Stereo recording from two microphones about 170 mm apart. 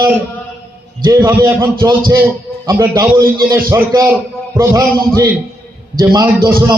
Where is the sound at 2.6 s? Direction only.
20° right (ahead or behind).